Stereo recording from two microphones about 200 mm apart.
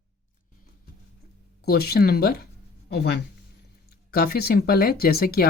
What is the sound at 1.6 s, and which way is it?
Speech, 50° left (ahead or behind).